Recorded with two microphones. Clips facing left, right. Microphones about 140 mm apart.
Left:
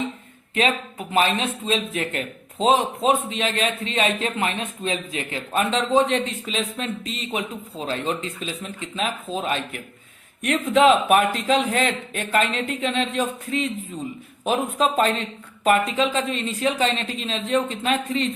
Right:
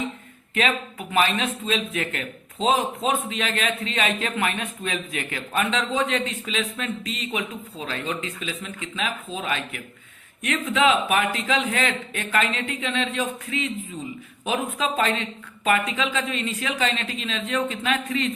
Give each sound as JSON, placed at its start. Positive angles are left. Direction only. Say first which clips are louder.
{"t": 0.5, "sound": "speech", "louder": "left 2 dB", "side_deg": 30}